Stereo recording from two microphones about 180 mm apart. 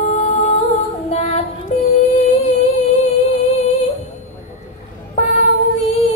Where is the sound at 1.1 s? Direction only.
35° left (ahead or behind).